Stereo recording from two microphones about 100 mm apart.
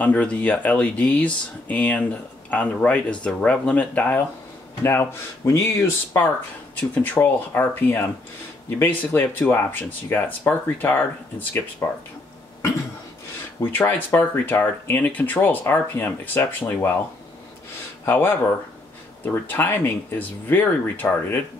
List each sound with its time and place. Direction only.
0.0 s speech: 15° left (ahead or behind)
13.6 s speech: 20° left (ahead or behind)
18.0 s speech: 25° left (ahead or behind)